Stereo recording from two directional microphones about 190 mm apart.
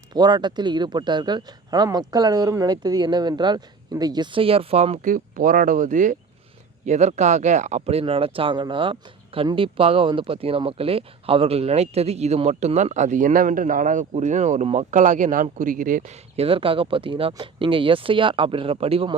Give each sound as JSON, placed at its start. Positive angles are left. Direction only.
{"t": 0.1, "sound": "speech", "side_deg": -20}